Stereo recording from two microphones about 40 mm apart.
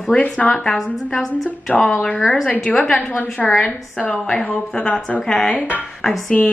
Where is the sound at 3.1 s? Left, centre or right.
Left.